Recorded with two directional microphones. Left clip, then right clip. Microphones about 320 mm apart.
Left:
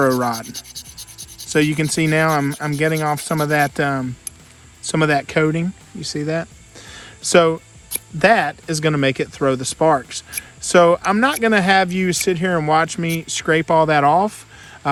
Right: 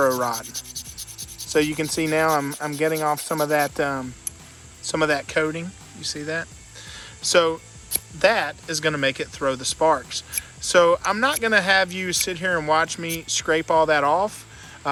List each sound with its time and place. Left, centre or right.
0.0 s speech: left